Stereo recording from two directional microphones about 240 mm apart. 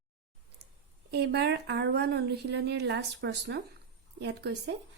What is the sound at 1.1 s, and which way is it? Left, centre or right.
Speech, right.